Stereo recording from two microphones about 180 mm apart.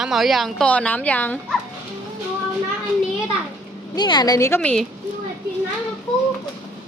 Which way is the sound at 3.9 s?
25° left (ahead or behind).